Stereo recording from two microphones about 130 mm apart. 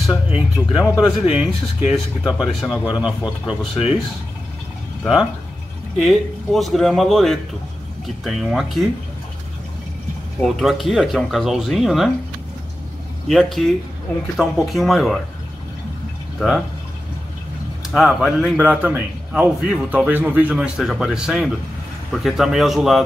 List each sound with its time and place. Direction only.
0.3 s a man's voice: 5° right (ahead or behind)
5.9 s speech: centre (ahead or behind)
10.4 s speech: centre (ahead or behind)
13.3 s speech: centre (ahead or behind)
16.3 s speech: centre (ahead or behind)
17.9 s speech: centre (ahead or behind)
18.6 s a man's voice: 10° right (ahead or behind)